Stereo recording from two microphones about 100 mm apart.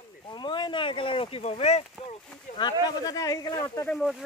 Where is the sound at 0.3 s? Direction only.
50° left (ahead or behind); by 2.1 s 90° left.